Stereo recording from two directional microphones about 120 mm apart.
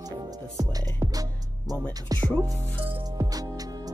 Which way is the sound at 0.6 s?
30° right (ahead or behind).